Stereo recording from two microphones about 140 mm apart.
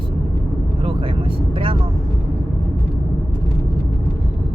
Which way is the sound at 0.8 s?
40° right (ahead or behind).